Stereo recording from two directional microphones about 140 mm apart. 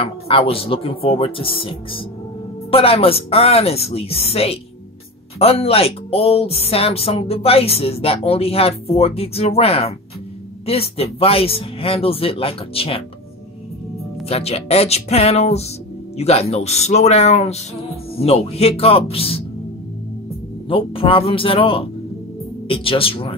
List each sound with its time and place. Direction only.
0.0 s speech: 40° left (ahead or behind)
14.2 s speech: 45° left (ahead or behind)
20.6 s speech: 40° left (ahead or behind)